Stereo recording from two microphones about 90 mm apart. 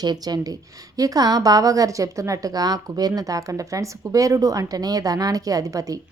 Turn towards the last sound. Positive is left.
turn(degrees=-40)  # may be behind; listen again after turning